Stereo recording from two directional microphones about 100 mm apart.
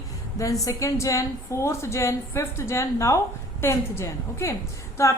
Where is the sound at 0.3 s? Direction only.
35° left (ahead or behind).